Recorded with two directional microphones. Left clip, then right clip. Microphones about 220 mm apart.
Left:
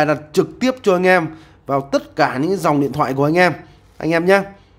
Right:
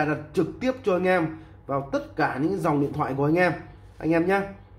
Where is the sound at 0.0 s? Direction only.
45° left (ahead or behind).